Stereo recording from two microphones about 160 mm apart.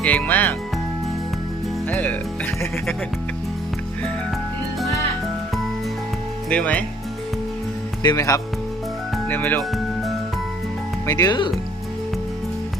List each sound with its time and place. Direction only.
0.0 s speech: 10° left (ahead or behind)
1.9 s speech: 10° left (ahead or behind)
6.5 s speech: 10° left (ahead or behind)
8.0 s speech: 20° left (ahead or behind)
9.7 s music: centre (ahead or behind)
11.0 s speech: 20° left (ahead or behind)